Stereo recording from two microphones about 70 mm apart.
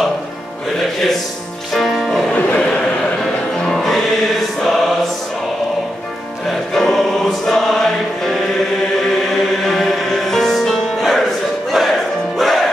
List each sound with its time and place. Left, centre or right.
1.7 s music: centre
2.3 s a sound: centre
3.5 s music: centre
6.4 s music: centre
9.4 s music: centre